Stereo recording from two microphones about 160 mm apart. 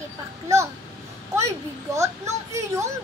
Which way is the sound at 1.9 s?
20° right (ahead or behind).